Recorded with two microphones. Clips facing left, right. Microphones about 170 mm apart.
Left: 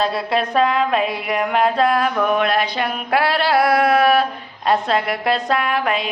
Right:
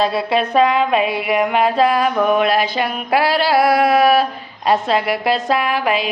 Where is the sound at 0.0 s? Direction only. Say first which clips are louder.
Right 3 dB; centre (ahead or behind).